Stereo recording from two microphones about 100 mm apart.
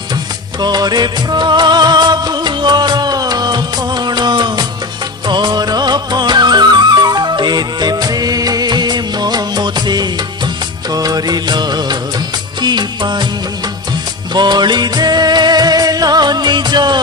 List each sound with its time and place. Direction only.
0.6 s music: 45° right (ahead or behind)
14.3 s music: 45° right (ahead or behind)